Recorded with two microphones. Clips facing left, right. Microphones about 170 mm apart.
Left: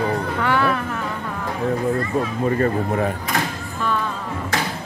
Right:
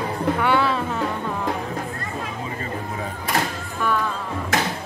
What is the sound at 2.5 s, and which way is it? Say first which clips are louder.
Speech: left 10 dB; 60° left (ahead or behind).